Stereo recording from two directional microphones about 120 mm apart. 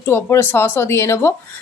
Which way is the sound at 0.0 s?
20° left (ahead or behind).